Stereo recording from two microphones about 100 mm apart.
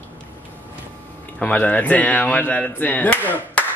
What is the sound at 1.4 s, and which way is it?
Speech, 15° left (ahead or behind).